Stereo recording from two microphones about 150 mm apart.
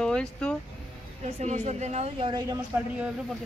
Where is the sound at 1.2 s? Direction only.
50° right (ahead or behind); by 2.6 s 25° right (ahead or behind).